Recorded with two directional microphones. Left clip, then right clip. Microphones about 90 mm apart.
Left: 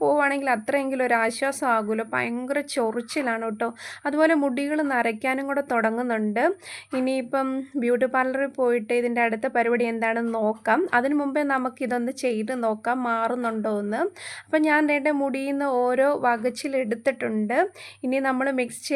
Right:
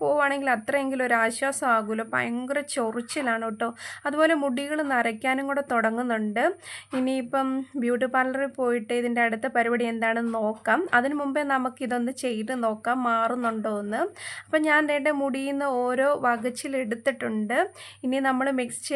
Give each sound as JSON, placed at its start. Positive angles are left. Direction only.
{"t": 0.0, "sound": "a woman's voice", "side_deg": 30}
{"t": 4.4, "sound": "a woman's voice", "side_deg": 15}
{"t": 4.6, "sound": "a woman's voice", "side_deg": 30}